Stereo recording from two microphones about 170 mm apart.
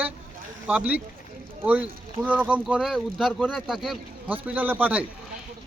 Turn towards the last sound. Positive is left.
turn(degrees=-10)  # may be behind; listen again after turning